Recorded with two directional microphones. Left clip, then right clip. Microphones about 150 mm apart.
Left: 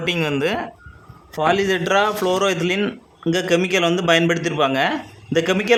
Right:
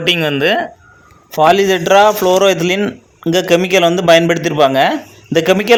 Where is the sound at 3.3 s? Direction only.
25° right (ahead or behind).